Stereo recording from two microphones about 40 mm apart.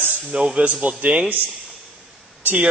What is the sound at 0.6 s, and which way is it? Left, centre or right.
Speech, right.